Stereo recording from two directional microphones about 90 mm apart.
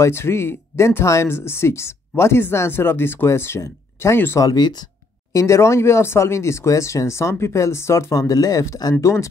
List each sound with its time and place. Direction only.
0.0 s speech: 30° left (ahead or behind)
4.5 s speech: 50° left (ahead or behind)
5.3 s speech: 35° left (ahead or behind)
9.0 s speech: 35° left (ahead or behind)